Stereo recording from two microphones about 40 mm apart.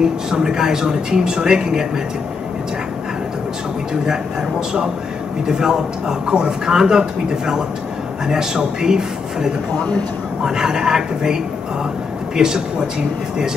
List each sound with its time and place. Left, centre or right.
0.0 s a man's voice: centre
3.9 s a man's voice: centre
9.8 s speech: left
10.4 s a man's voice: centre
12.4 s a man's voice: centre